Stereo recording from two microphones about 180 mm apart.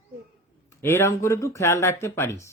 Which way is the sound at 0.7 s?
15° left (ahead or behind).